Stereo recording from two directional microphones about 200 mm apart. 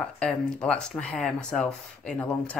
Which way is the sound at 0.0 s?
5° left (ahead or behind).